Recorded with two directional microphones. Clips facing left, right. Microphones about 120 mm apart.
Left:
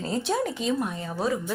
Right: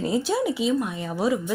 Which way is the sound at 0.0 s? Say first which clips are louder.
Right 3 dB; 5° right (ahead or behind).